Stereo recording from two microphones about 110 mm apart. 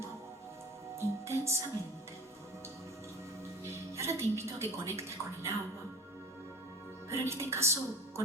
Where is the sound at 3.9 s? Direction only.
25° right (ahead or behind).